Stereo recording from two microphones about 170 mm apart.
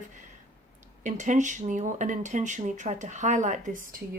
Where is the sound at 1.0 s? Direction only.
45° right (ahead or behind).